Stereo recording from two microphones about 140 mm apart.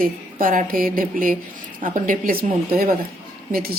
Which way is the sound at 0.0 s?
85° right.